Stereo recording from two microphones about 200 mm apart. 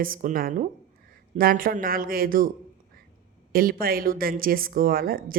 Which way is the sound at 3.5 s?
45° right (ahead or behind).